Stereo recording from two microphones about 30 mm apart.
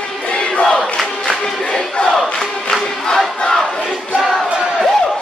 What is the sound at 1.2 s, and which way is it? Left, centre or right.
Battle cry, left.